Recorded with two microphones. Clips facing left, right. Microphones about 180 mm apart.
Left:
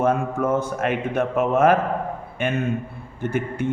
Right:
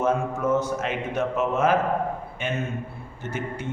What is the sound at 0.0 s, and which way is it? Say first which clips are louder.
A man's voice: left 3 dB; 55° left (ahead or behind).